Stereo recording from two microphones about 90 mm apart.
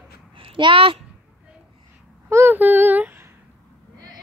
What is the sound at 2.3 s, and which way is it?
Child singing, 30° right (ahead or behind).